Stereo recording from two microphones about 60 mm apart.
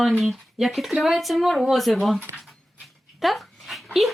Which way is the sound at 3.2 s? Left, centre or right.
Centre.